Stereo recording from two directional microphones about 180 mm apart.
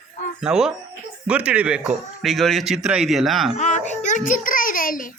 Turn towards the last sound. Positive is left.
turn(degrees=50)  # may be behind; listen again after turning